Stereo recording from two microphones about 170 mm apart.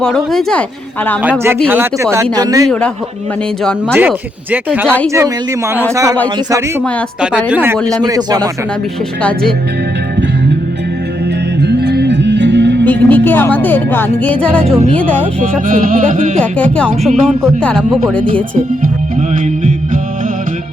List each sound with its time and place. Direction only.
0.0 s speech: 5° left (ahead or behind)
1.2 s speech: 10° right (ahead or behind)
3.6 s speech: 5° left (ahead or behind)
4.5 s speech: 10° right (ahead or behind)
7.2 s speech: 10° right (ahead or behind)
8.0 s speech: 25° right (ahead or behind)
9.2 s speech: 5° left (ahead or behind)
11.6 s music: 80° right
12.8 s speech: 10° left (ahead or behind)
15.6 s music: 55° right (ahead or behind)
16.4 s speech: 5° left (ahead or behind)